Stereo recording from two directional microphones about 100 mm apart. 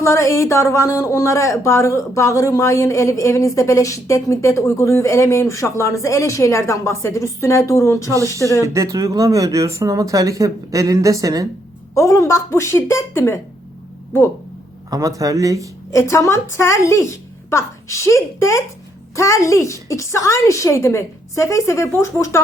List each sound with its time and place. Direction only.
0.0 s speech: 30° left (ahead or behind)
8.6 s speech: 30° right (ahead or behind)
11.9 s a woman's voice: 35° left (ahead or behind)
14.8 s speech: 35° right (ahead or behind)
15.9 s a woman's voice: 30° left (ahead or behind)